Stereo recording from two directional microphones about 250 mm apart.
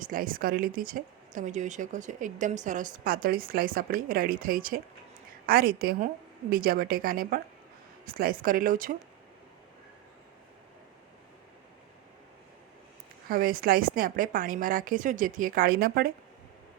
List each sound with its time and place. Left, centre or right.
0.0 s speech: right
13.2 s speech: right